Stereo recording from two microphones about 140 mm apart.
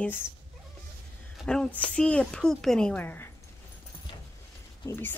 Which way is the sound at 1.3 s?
5° left (ahead or behind).